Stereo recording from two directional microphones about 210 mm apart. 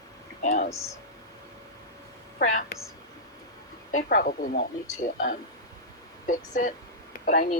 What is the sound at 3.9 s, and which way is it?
Speech, 40° left (ahead or behind).